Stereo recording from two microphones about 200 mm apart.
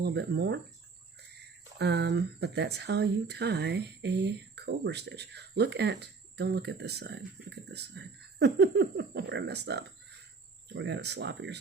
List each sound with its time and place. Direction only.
0.0 s speech: 55° right (ahead or behind)
1.8 s speech: 55° right (ahead or behind)